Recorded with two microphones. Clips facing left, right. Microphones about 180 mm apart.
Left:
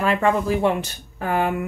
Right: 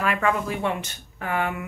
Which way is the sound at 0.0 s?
30° left (ahead or behind).